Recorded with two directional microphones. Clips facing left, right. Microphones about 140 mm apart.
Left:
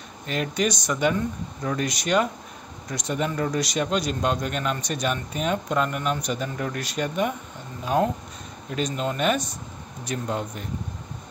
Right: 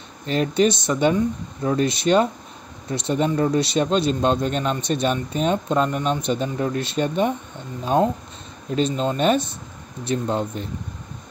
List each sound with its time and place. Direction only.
0.3 s speech: 30° right (ahead or behind)